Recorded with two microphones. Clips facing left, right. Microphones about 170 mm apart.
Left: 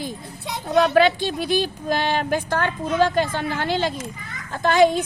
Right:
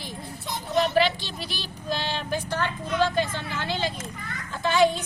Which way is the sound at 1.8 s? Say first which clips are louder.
Left 7 dB; 50° left (ahead or behind).